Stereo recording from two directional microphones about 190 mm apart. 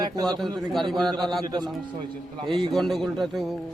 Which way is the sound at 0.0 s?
20° right (ahead or behind).